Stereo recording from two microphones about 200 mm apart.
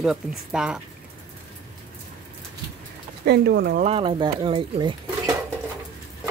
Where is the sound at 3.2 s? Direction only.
55° right (ahead or behind).